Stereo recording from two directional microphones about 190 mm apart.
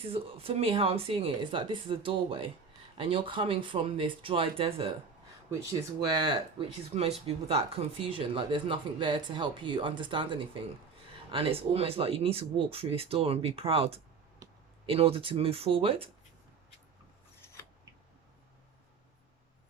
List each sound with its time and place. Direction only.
0.1 s speech: 30° right (ahead or behind)
6.1 s speech: 20° right (ahead or behind)
14.4 s a sound: 20° right (ahead or behind)
14.8 s speech: 30° right (ahead or behind)